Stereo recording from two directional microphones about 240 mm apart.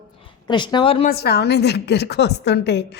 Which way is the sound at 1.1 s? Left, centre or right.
Left.